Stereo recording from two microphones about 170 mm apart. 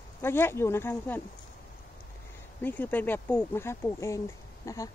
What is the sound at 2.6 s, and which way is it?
Speech, 10° left (ahead or behind).